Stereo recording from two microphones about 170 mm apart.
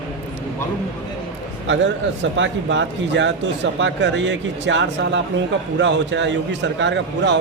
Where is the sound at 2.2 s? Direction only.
90° right.